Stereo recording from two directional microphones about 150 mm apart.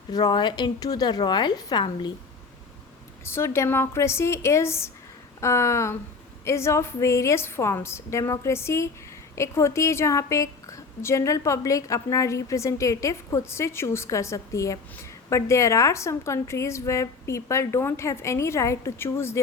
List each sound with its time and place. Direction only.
0.1 s a woman's voice: 30° left (ahead or behind)
3.2 s a woman's voice: 15° left (ahead or behind)